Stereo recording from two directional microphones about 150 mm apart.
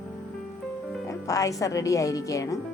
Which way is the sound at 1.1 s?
20° left (ahead or behind).